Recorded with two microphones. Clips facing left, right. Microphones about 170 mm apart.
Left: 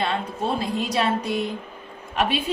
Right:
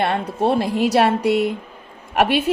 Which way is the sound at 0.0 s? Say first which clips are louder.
Right 6 dB; 65° right (ahead or behind).